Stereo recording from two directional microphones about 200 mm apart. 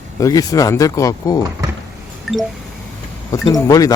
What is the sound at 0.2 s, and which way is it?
Speech, 15° left (ahead or behind).